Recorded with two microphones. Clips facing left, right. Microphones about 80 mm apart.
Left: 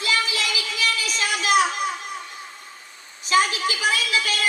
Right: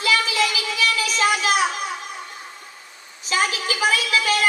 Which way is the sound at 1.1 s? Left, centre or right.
Right.